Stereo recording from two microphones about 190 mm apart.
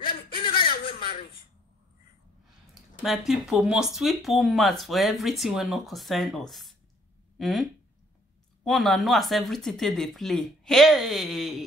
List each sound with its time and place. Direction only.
0.4 s chuckle: 25° left (ahead or behind)
2.7 s speech: centre (ahead or behind)
8.6 s speech: centre (ahead or behind)